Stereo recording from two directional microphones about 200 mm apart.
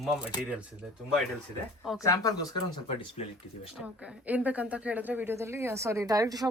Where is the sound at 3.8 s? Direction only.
5° right (ahead or behind).